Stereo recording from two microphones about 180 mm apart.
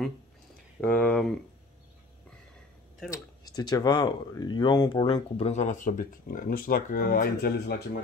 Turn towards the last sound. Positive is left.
turn(degrees=60)  # may be behind; listen again after turning